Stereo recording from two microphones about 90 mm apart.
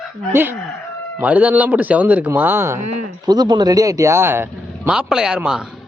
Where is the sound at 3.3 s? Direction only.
50° right (ahead or behind); by 4.9 s 25° right (ahead or behind).